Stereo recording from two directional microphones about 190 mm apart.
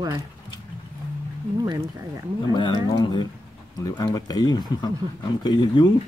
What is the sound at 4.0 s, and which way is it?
Speech, 20° left (ahead or behind).